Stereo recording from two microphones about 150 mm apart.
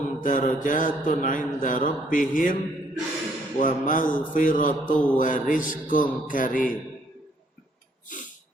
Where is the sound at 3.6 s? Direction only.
65° left (ahead or behind).